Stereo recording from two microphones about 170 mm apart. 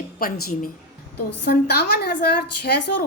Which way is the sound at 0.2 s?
55° left (ahead or behind).